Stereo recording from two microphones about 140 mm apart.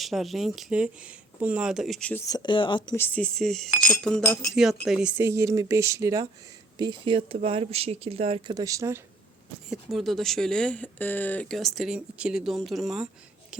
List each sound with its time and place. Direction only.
0.0 s speech: centre (ahead or behind)
2.2 s speech: 30° left (ahead or behind)
2.9 s speech: 15° left (ahead or behind); by 5.1 s 5° right (ahead or behind)
5.1 s speech: 20° right (ahead or behind)
6.7 s speech: 35° right (ahead or behind)
8.5 s speech: 25° right (ahead or behind)
9.6 s speech: centre (ahead or behind)